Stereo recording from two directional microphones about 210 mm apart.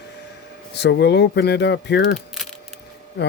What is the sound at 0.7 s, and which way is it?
Speech, 55° left (ahead or behind).